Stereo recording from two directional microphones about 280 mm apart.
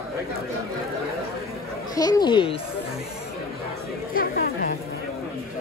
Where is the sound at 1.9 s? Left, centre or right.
Centre.